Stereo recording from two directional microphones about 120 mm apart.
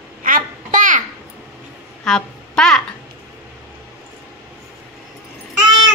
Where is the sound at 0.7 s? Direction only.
90° right.